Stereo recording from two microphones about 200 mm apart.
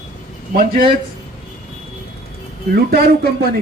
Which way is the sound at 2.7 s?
55° right (ahead or behind).